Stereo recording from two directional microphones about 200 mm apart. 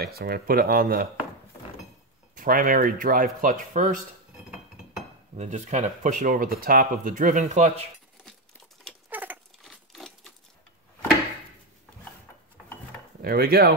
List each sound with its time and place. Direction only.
0.0 s speech: 50° right (ahead or behind)
2.3 s speech: 45° right (ahead or behind)
5.3 s speech: 35° right (ahead or behind)
9.1 s a sound: 10° right (ahead or behind)
9.6 s sewing machine: centre (ahead or behind)
13.2 s speech: 50° right (ahead or behind)